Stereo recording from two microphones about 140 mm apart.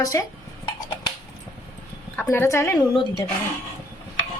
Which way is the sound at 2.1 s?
15° left (ahead or behind).